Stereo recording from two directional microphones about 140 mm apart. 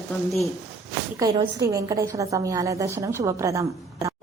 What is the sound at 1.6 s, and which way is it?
A woman's voice, 20° right (ahead or behind).